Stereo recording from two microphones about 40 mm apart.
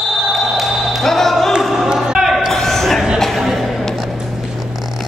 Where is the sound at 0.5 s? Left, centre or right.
Centre.